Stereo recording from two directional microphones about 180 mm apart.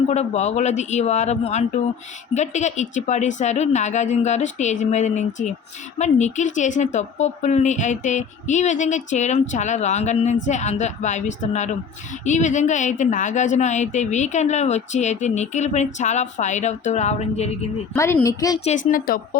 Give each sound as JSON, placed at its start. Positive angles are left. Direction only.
{"t": 0.1, "sound": "a woman's voice", "side_deg": 40}
{"t": 17.9, "sound": "a woman's voice", "side_deg": 15}
{"t": 18.9, "sound": "speech", "side_deg": 50}